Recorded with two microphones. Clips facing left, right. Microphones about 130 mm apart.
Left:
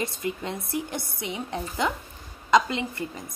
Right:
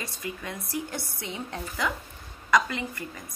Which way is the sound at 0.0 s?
25° left (ahead or behind).